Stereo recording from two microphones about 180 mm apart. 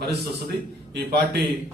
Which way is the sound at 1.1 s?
65° right (ahead or behind).